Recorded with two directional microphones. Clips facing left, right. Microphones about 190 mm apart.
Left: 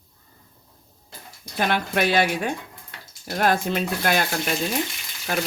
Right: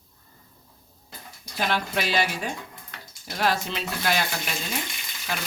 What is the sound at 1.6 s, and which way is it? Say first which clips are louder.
Speech: left 4 dB; 55° left (ahead or behind).